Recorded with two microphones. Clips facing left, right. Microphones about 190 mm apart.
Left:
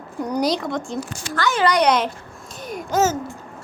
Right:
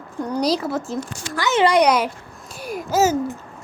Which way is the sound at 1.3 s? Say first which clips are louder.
Right 2 dB; 20° right (ahead or behind).